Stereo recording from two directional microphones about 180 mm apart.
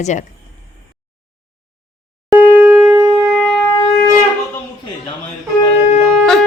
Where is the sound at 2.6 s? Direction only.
10° right (ahead or behind).